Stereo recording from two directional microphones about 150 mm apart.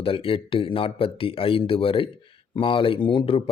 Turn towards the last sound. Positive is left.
turn(degrees=35)  # may be behind; listen again after turning